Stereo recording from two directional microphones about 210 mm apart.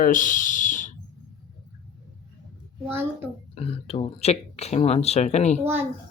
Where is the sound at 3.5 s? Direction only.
30° left (ahead or behind).